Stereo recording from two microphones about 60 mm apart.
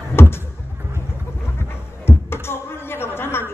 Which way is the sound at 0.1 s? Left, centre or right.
Left.